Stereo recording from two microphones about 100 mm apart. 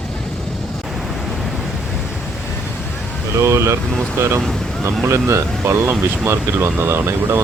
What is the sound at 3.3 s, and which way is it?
Speech, 30° right (ahead or behind).